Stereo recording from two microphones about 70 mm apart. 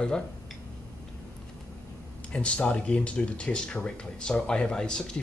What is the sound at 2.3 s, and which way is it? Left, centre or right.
Speech, centre.